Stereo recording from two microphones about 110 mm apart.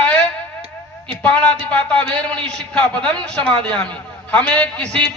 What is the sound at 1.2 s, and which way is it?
A man's voice, 10° left (ahead or behind).